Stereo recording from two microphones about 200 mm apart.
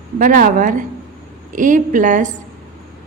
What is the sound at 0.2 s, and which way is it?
A woman's voice, 40° right (ahead or behind).